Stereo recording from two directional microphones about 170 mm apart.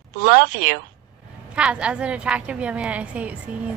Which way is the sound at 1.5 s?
5° right (ahead or behind).